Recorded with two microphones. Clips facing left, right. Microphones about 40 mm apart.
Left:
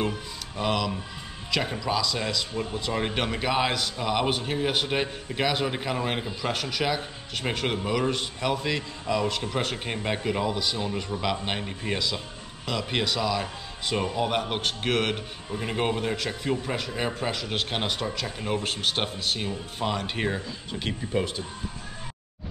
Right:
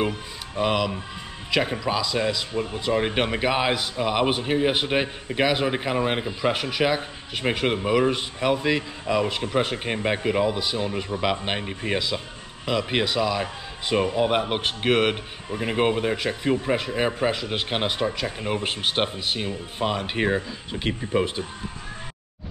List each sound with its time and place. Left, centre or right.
0.6 s speech: centre